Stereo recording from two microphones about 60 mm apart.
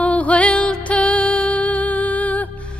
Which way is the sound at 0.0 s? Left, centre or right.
Left.